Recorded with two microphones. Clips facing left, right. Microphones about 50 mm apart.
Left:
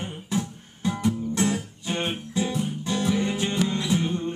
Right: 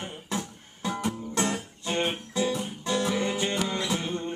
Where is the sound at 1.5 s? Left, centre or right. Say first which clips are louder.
Left 1 dB; centre.